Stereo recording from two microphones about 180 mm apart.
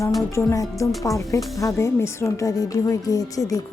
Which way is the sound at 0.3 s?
15° left (ahead or behind).